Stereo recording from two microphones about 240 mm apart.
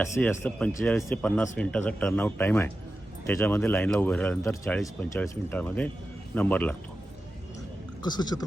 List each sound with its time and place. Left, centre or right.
0.0 s speech: centre
8.0 s speech: centre